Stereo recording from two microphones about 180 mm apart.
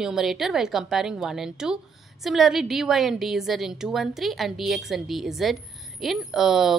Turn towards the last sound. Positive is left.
turn(degrees=0)  # may be behind; listen again after turning